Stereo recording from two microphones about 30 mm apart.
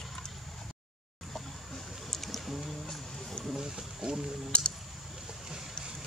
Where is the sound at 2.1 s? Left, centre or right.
Centre.